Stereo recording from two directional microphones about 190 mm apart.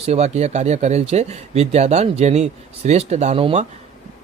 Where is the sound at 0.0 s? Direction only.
35° right (ahead or behind).